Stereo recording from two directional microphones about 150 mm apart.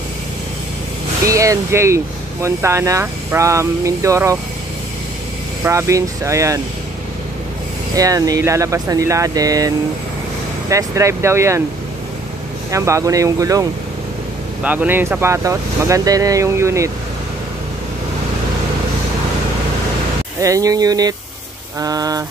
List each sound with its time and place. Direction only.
1.2 s speech: 20° right (ahead or behind)
5.6 s speech: 20° right (ahead or behind)
7.9 s speech: 25° right (ahead or behind)
10.7 s speech: 20° right (ahead or behind)
12.7 s speech: 20° right (ahead or behind)
14.6 s speech: 10° right (ahead or behind)
20.3 s speech: 20° right (ahead or behind)